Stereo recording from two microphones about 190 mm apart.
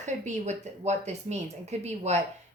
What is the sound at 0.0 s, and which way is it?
Speech, 40° right (ahead or behind).